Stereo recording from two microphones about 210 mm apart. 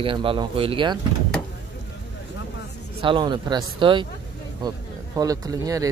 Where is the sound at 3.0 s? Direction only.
25° right (ahead or behind).